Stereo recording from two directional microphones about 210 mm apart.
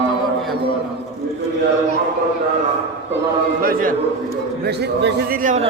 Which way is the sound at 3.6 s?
45° right (ahead or behind).